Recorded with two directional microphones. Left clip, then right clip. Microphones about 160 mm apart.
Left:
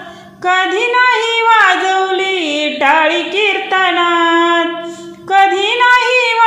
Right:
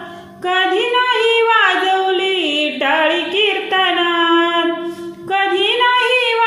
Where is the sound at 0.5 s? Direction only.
25° left (ahead or behind).